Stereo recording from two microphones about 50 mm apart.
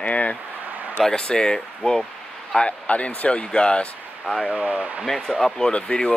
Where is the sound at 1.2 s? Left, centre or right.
Centre.